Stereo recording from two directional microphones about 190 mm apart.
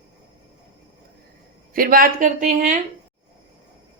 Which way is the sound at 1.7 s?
50° right (ahead or behind).